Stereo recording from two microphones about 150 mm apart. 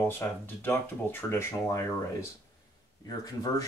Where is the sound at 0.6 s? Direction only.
15° left (ahead or behind).